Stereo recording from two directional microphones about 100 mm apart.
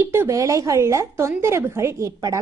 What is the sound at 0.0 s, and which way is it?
A woman's voice, 25° right (ahead or behind).